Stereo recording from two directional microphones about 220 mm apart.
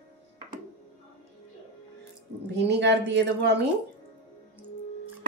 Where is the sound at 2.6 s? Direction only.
50° right (ahead or behind).